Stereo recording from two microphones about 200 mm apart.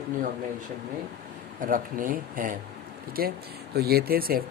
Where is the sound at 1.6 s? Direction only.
45° right (ahead or behind).